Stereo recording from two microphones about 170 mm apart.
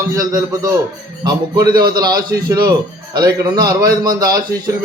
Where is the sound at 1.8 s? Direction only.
25° right (ahead or behind).